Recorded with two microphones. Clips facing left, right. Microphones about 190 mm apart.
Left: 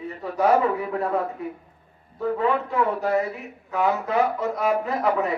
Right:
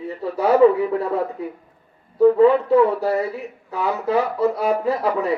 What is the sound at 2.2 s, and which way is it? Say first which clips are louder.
A man's voice: right 10 dB; 35° right (ahead or behind).